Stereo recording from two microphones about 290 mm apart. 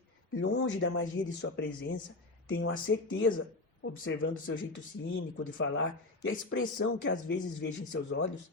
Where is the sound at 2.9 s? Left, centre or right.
Left.